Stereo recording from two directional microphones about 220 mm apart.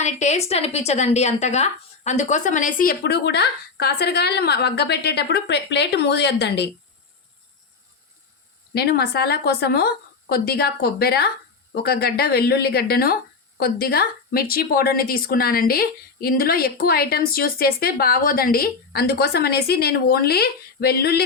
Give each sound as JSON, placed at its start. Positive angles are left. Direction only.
{"t": 0.0, "sound": "a woman's voice", "side_deg": 30}
{"t": 8.7, "sound": "a woman's voice", "side_deg": 45}